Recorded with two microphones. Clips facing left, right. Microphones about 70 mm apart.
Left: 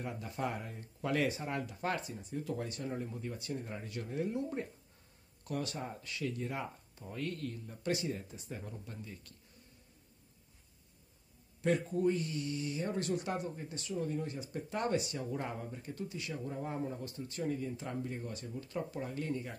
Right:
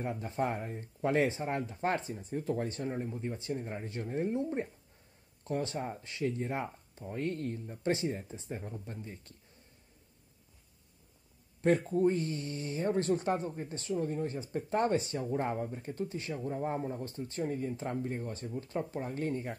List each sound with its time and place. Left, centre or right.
0.0 s speech: right
11.6 s speech: right